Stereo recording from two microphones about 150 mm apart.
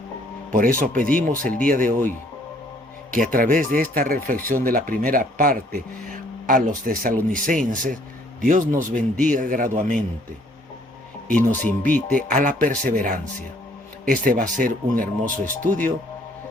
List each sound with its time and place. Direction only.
0.5 s speech: 65° right (ahead or behind)
11.3 s speech: 10° left (ahead or behind)
12.1 s speech: 60° right (ahead or behind)